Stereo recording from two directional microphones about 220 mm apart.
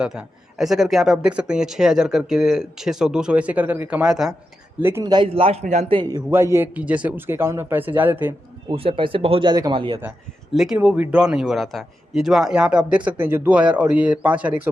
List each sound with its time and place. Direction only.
0.0 s a man's voice: 5° right (ahead or behind)
8.7 s speech: 25° right (ahead or behind)
10.5 s a man's voice: centre (ahead or behind)